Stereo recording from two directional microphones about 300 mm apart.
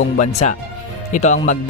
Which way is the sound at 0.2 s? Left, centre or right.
Left.